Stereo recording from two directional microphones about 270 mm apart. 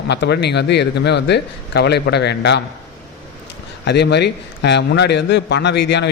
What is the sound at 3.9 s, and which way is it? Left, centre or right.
A man's voice, left.